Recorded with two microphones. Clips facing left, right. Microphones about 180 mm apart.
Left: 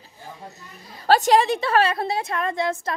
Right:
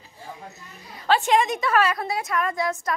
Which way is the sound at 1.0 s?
40° left (ahead or behind).